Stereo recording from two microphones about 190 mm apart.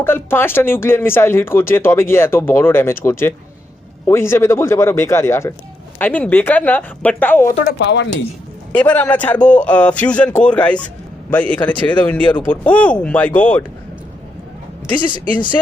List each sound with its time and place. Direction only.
0.0 s speech: 10° left (ahead or behind)
7.8 s speech: 65° left (ahead or behind)
8.7 s speech: 10° left (ahead or behind)
14.9 s speech: 25° left (ahead or behind)